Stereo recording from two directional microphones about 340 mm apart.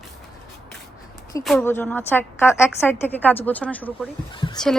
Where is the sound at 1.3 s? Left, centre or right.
Centre.